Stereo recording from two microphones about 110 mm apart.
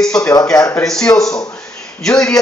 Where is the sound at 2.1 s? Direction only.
5° left (ahead or behind).